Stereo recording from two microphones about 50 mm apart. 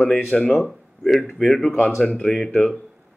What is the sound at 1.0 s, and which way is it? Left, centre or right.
Speech, centre.